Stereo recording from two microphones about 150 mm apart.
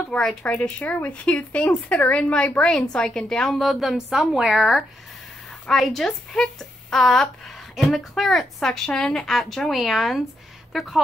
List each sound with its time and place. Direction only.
0.1 s a woman's voice: 5° left (ahead or behind)